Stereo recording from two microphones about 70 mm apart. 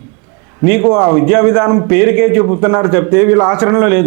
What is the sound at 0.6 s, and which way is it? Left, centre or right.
A man's voice, right.